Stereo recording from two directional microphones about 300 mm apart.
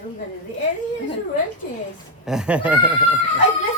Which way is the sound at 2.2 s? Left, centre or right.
Centre.